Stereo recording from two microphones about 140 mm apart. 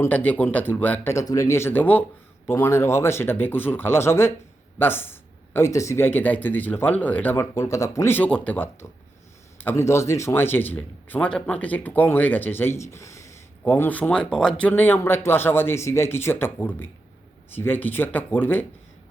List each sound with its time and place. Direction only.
0.0 s a man's voice: 15° left (ahead or behind)